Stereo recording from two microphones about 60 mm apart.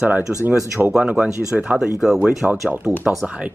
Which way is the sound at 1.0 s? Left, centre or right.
Centre.